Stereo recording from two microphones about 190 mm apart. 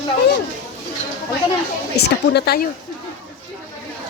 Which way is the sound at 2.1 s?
60° left (ahead or behind).